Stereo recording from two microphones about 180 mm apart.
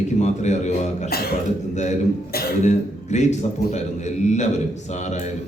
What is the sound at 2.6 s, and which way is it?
A man's voice, 40° left (ahead or behind).